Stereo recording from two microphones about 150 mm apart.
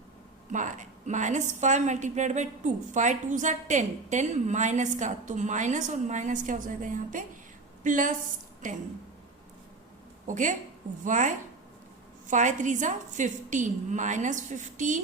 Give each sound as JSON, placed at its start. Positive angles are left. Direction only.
{"t": 0.5, "sound": "a woman's voice", "side_deg": -55}
{"t": 10.2, "sound": "a woman's voice", "side_deg": -55}